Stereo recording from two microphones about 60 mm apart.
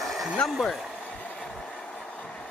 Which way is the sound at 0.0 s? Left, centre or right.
Centre.